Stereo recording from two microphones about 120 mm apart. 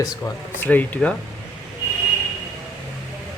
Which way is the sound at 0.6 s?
15° left (ahead or behind).